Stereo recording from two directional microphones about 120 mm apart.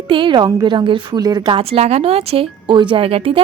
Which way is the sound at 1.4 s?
50° right (ahead or behind).